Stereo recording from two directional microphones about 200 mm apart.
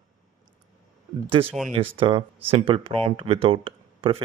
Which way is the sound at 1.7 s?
25° right (ahead or behind).